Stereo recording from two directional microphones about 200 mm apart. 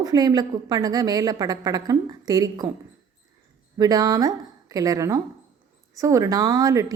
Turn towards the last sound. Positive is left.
turn(degrees=-20)  # may be behind; listen again after turning